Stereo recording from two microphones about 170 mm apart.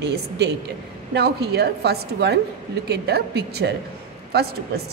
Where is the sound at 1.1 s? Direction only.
70° right (ahead or behind).